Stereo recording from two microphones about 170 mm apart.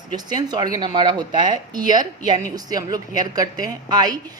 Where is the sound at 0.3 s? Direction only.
25° right (ahead or behind).